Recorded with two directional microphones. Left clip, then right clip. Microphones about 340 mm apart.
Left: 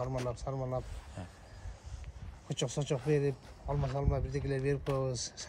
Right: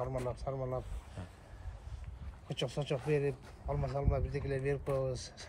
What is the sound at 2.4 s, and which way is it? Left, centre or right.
Speech, left.